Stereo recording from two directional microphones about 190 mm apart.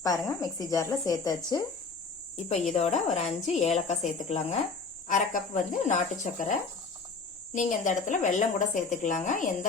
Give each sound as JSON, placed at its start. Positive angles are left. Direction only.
{"t": 0.0, "sound": "speech", "side_deg": 20}
{"t": 2.3, "sound": "speech", "side_deg": 35}
{"t": 7.5, "sound": "speech", "side_deg": 40}